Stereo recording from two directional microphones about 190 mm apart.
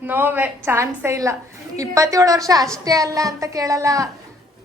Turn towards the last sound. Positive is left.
turn(degrees=-15)  # may be behind; listen again after turning